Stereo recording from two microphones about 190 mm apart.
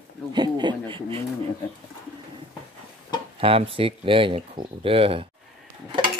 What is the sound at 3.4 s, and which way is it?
Speech, 30° right (ahead or behind).